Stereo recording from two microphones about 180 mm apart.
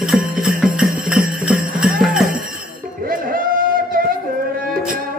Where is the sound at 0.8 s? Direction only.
50° right (ahead or behind).